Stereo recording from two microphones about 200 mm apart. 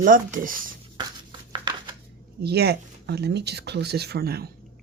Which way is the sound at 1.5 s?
20° right (ahead or behind).